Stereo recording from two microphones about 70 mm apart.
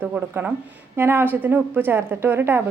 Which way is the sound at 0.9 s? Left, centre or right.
Right.